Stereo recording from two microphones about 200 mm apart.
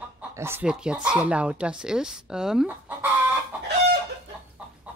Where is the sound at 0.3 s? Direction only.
10° right (ahead or behind).